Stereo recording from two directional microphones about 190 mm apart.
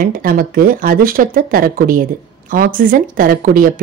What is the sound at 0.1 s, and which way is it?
A woman's voice, 50° right (ahead or behind).